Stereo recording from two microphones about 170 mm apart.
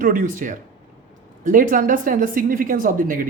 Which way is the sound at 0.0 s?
50° right (ahead or behind).